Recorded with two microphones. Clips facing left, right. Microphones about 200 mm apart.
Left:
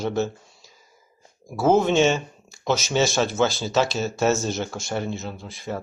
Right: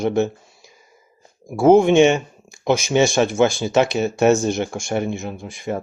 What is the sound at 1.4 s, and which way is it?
Speech, 15° right (ahead or behind).